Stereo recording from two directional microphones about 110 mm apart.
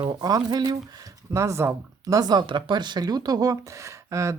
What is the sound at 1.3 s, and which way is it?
Speech, 25° right (ahead or behind).